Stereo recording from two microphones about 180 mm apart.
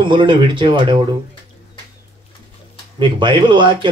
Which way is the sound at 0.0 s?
25° right (ahead or behind).